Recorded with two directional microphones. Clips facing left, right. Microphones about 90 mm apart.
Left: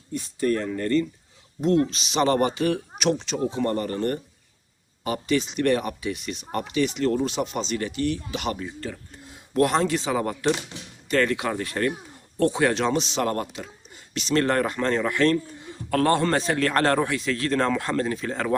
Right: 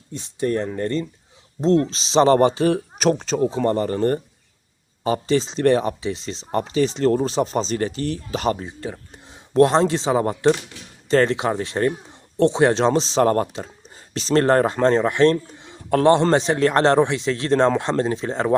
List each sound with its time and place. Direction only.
0.1 s a man's voice: 20° right (ahead or behind); by 8.6 s 35° right (ahead or behind)
8.6 s a man's voice: 20° right (ahead or behind)